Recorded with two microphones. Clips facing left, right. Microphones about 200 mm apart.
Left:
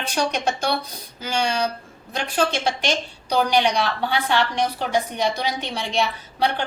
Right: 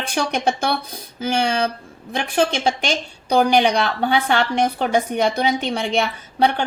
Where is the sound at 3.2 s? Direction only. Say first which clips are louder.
Right 4 dB; 55° right (ahead or behind).